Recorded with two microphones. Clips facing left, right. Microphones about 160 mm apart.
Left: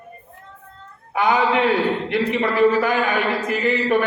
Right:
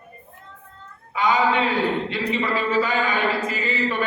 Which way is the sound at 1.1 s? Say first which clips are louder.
Left 2 dB; 65° left (ahead or behind).